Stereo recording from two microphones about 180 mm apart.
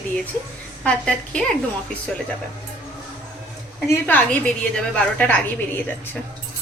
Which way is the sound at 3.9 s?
10° left (ahead or behind).